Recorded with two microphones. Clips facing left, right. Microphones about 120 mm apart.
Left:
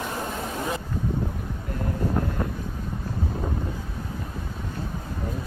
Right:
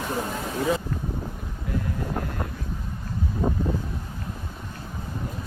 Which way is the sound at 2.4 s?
15° right (ahead or behind).